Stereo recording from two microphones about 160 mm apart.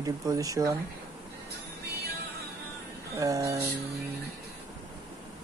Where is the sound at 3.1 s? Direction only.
20° right (ahead or behind).